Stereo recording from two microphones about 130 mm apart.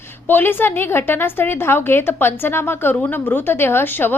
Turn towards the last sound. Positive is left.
turn(degrees=15)  # may be behind; listen again after turning